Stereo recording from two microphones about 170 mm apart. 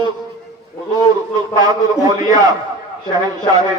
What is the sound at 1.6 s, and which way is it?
Speech, 20° right (ahead or behind).